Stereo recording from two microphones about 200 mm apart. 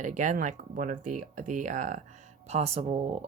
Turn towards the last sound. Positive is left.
turn(degrees=-30)  # may be behind; listen again after turning